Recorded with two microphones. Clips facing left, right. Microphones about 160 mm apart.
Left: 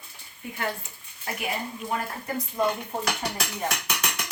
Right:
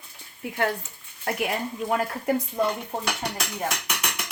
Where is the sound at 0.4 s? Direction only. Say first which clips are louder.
Right 5 dB; 65° right (ahead or behind).